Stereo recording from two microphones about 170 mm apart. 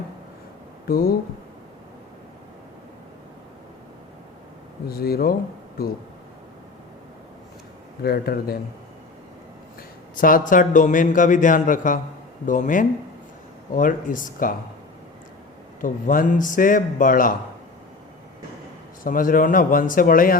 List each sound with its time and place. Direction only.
0.9 s speech: 60° left (ahead or behind)
4.9 s speech: 65° left (ahead or behind)
8.0 s speech: 65° left (ahead or behind)
10.2 s a man's voice: 55° left (ahead or behind)
15.8 s a man's voice: 50° left (ahead or behind)
19.0 s speech: 55° left (ahead or behind)